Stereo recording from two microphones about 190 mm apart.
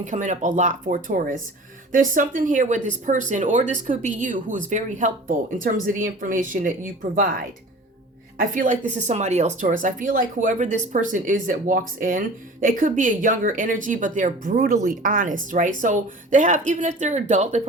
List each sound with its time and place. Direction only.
0.0 s speech: 40° right (ahead or behind)